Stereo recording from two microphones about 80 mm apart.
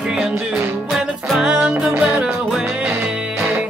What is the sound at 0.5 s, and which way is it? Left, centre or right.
Music, right.